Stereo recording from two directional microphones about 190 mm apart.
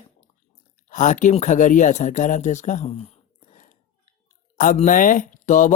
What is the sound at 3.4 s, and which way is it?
Chewing, 40° left (ahead or behind).